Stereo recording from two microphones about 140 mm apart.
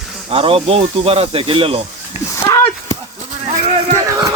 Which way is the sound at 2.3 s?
20° left (ahead or behind).